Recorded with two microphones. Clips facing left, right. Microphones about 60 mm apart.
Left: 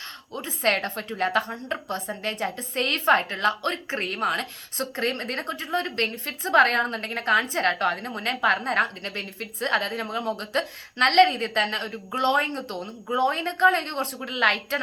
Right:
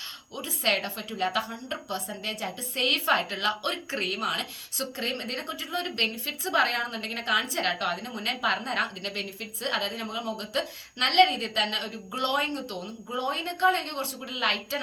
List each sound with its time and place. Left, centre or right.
0.3 s a woman's voice: left